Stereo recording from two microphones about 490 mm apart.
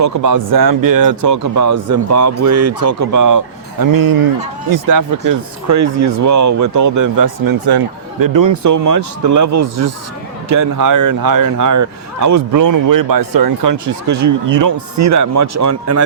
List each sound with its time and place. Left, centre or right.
0.0 s speech: right